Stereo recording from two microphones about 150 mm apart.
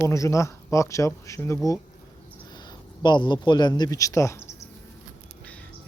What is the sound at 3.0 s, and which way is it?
Speech, 30° left (ahead or behind).